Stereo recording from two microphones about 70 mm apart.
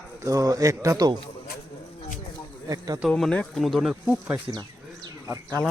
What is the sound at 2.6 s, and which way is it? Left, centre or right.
Speech, right.